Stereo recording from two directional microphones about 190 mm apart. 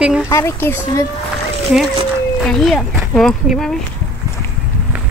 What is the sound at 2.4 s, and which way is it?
Speech, centre (ahead or behind).